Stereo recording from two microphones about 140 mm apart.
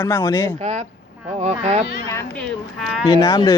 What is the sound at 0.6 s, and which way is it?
Speech, 55° right (ahead or behind).